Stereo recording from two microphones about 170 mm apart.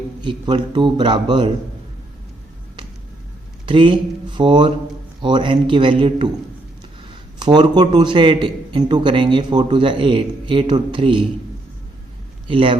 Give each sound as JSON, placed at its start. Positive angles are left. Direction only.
{"t": 0.2, "sound": "a man's voice", "side_deg": -25}
{"t": 3.7, "sound": "a man's voice", "side_deg": -30}
{"t": 7.3, "sound": "a man's voice", "side_deg": -25}
{"t": 12.5, "sound": "a man's voice", "side_deg": -30}